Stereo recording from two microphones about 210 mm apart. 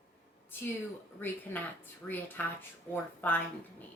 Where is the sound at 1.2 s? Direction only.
10° left (ahead or behind).